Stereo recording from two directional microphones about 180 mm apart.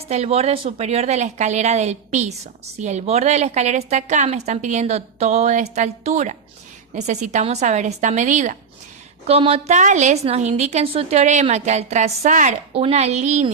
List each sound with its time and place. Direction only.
0.0 s a woman's voice: 35° right (ahead or behind)
9.2 s a woman's voice: 35° right (ahead or behind)